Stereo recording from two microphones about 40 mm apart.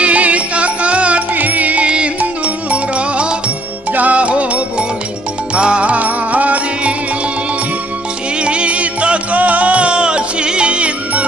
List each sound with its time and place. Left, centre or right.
0.0 s music: right
1.3 s music: right
8.4 s music: right